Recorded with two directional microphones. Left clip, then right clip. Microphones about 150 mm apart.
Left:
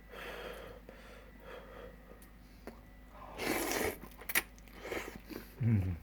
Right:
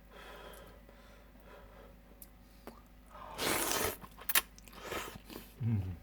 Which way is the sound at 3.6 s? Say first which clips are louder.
Even; 15° right (ahead or behind).